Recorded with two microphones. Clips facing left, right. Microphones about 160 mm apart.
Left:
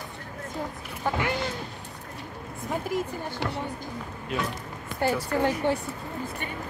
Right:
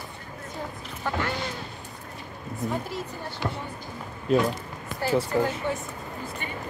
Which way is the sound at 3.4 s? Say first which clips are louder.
Right 1 dB; 70° left (ahead or behind).